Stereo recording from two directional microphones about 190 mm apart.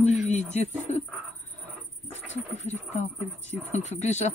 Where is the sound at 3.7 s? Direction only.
40° left (ahead or behind).